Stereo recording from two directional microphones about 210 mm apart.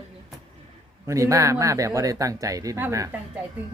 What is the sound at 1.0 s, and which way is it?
Speech, 15° right (ahead or behind).